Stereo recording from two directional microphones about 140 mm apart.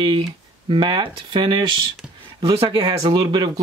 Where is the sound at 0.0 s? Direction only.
35° right (ahead or behind).